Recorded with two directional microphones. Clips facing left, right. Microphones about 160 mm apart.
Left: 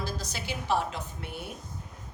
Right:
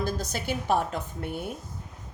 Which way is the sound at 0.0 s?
50° right (ahead or behind).